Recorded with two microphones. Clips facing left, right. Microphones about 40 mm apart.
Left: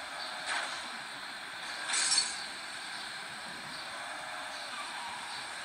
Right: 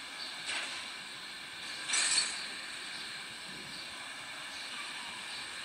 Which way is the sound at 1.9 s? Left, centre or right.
Right.